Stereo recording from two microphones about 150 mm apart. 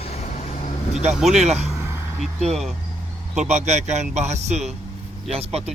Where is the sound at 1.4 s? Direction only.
50° right (ahead or behind).